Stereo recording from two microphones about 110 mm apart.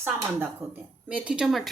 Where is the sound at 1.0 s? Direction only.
10° right (ahead or behind).